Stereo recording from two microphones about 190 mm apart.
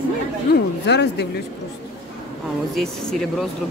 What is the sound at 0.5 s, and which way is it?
Speech, 60° left (ahead or behind).